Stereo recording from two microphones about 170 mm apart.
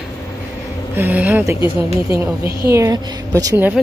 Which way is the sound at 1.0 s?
10° right (ahead or behind).